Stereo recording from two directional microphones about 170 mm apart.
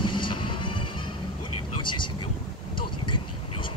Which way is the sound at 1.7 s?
30° left (ahead or behind).